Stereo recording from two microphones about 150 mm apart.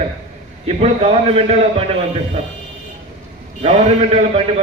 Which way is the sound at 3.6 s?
45° right (ahead or behind).